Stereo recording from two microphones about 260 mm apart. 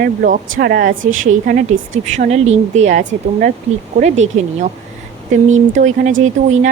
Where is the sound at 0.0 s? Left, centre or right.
Right.